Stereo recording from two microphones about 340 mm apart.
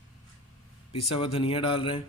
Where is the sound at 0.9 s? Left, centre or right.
Centre.